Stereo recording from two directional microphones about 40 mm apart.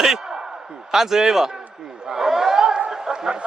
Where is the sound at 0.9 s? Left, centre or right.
Centre.